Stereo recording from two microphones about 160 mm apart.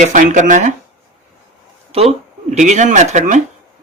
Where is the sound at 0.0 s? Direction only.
50° right (ahead or behind).